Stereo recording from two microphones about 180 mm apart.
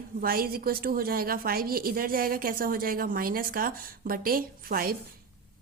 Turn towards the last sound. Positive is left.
turn(degrees=-55)  # may be behind; listen again after turning